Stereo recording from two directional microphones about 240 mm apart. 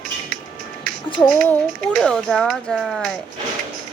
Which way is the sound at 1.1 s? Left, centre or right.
Left.